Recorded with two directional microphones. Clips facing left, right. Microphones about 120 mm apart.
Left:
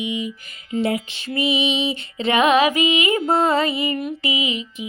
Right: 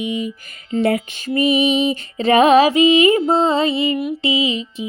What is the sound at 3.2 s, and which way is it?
Music, 20° right (ahead or behind).